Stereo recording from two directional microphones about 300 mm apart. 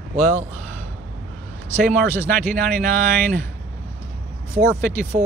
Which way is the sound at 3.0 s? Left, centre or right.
Centre.